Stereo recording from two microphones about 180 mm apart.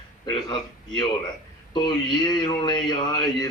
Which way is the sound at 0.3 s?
25° left (ahead or behind).